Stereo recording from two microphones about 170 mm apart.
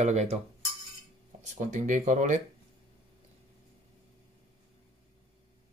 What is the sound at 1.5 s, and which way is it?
Speech, 50° right (ahead or behind).